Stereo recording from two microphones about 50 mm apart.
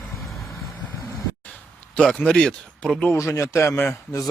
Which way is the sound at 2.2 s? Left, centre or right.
Centre.